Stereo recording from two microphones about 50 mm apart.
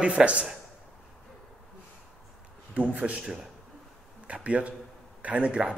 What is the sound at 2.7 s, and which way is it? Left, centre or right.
Speech, right.